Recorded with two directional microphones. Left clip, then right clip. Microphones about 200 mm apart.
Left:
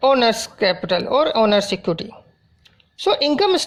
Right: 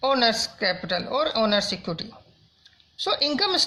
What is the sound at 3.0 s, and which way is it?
Speech, 30° left (ahead or behind).